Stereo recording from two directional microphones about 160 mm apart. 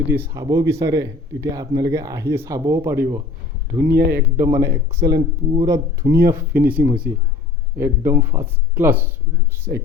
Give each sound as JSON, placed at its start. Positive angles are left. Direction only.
{"t": 0.1, "sound": "speech", "side_deg": -15}
{"t": 3.9, "sound": "speech", "side_deg": -75}
{"t": 4.4, "sound": "speech", "side_deg": -20}
{"t": 9.7, "sound": "speech", "side_deg": -45}